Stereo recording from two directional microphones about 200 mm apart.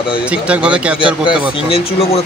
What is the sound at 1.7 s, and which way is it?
Speech, 30° left (ahead or behind).